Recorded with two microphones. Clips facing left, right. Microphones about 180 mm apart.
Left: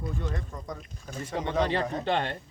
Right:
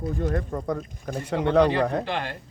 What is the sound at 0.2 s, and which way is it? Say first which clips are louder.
Speech: right 9 dB; 50° right (ahead or behind).